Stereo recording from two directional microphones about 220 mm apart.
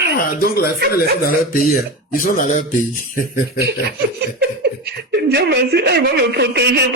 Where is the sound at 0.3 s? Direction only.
40° left (ahead or behind).